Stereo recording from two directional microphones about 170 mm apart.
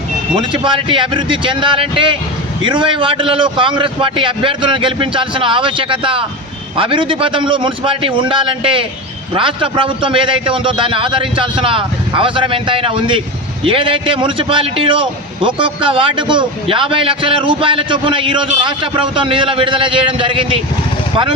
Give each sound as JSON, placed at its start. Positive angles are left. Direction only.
{"t": 0.3, "sound": "a man's voice", "side_deg": -30}